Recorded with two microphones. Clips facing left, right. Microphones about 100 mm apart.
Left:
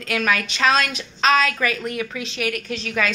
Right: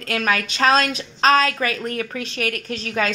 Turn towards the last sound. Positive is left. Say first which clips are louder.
# right 1 dB
turn(degrees=-40)  # may be behind; listen again after turning